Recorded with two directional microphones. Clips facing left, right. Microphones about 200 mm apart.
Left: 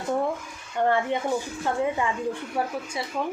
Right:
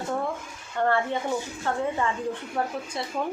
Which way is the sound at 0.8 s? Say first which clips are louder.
Left 1 dB; 15° left (ahead or behind).